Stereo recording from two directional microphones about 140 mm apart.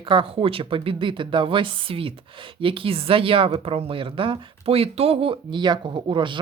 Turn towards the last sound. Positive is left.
turn(degrees=-35)  # may be behind; listen again after turning